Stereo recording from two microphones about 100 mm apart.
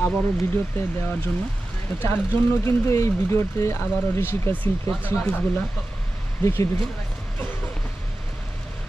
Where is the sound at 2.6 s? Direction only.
30° left (ahead or behind); by 5.6 s 10° left (ahead or behind).